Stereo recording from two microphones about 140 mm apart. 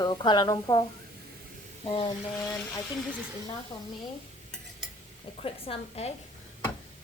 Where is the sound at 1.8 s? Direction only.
40° left (ahead or behind).